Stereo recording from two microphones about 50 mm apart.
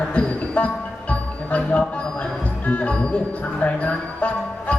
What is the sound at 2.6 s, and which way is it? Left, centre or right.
Speech, left.